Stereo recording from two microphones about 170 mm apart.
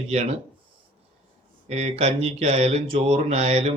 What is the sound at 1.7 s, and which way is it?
Speech, 40° right (ahead or behind).